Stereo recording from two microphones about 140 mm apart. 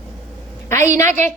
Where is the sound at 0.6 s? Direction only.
20° left (ahead or behind).